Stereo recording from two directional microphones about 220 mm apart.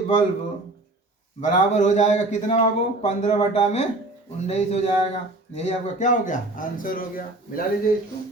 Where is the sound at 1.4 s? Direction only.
35° left (ahead or behind).